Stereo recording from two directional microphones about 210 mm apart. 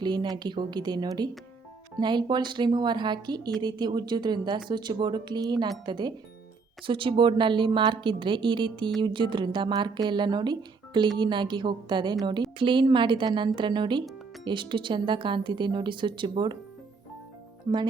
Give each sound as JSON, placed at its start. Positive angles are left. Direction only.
{"t": 0.0, "sound": "a woman's voice", "side_deg": -20}